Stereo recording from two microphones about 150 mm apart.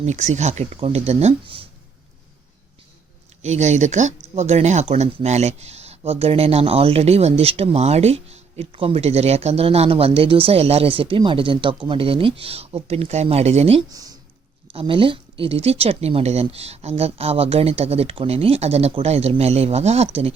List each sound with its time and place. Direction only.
0.0 s speech: 50° right (ahead or behind)
3.4 s speech: 50° right (ahead or behind)
13.9 s speech: 25° right (ahead or behind)
14.7 s speech: 35° right (ahead or behind)